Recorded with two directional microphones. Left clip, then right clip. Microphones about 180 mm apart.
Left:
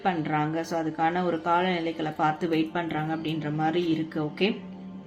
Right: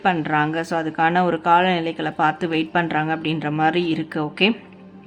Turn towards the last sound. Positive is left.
turn(degrees=-35)  # may be behind; listen again after turning